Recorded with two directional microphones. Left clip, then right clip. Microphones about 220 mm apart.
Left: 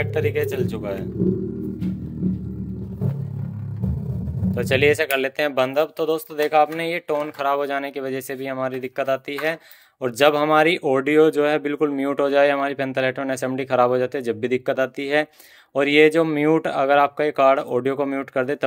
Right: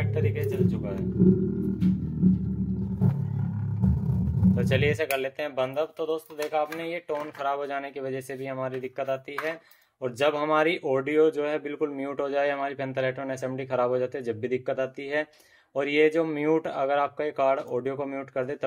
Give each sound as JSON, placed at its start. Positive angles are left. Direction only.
{"t": 0.0, "sound": "speech", "side_deg": 50}
{"t": 4.6, "sound": "speech", "side_deg": 35}